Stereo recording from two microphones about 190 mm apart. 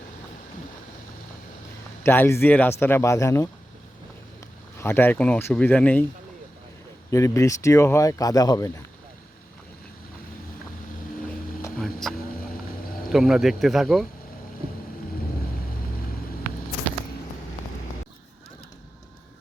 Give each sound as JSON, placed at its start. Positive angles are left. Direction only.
{"t": 2.0, "sound": "speech", "side_deg": 10}
{"t": 4.8, "sound": "speech", "side_deg": 10}
{"t": 7.1, "sound": "speech", "side_deg": 15}
{"t": 11.8, "sound": "vehicle", "side_deg": 0}
{"t": 13.1, "sound": "speech", "side_deg": 0}